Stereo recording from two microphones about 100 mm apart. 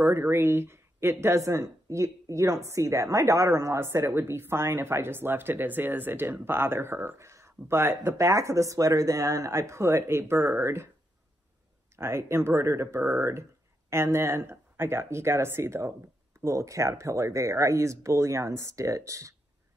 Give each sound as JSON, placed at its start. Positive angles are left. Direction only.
{"t": 0.0, "sound": "speech", "side_deg": -20}
{"t": 12.0, "sound": "speech", "side_deg": -25}